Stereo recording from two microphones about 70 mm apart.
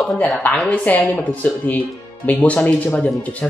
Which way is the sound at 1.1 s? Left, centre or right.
Left.